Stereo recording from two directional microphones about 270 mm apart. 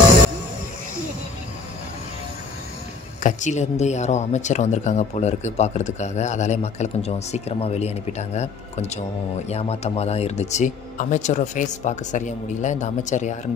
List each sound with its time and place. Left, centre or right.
3.2 s speech: left